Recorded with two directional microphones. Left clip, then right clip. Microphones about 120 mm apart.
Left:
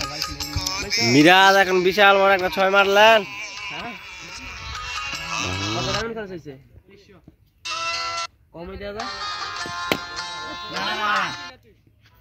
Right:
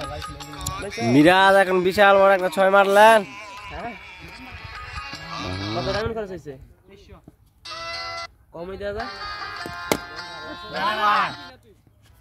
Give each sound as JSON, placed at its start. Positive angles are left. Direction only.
{"t": 0.0, "sound": "music", "side_deg": 45}
{"t": 1.1, "sound": "speech", "side_deg": -5}
{"t": 3.3, "sound": "a sound", "side_deg": 15}
{"t": 3.9, "sound": "music", "side_deg": 50}
{"t": 6.0, "sound": "speech", "side_deg": -5}
{"t": 7.6, "sound": "music", "side_deg": 40}
{"t": 8.5, "sound": "speech", "side_deg": 5}
{"t": 8.9, "sound": "music", "side_deg": 40}
{"t": 10.8, "sound": "speech", "side_deg": 0}
{"t": 11.2, "sound": "speech", "side_deg": 45}